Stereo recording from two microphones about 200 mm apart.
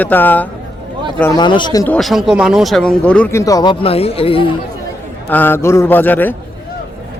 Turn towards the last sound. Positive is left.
turn(degrees=10)  # may be behind; listen again after turning